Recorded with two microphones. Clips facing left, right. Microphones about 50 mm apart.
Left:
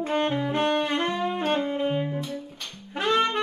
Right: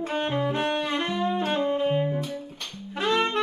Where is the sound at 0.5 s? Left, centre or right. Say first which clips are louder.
Left 3 dB; left.